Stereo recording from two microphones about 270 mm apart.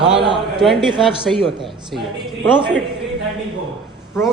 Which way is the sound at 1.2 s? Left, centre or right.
Centre.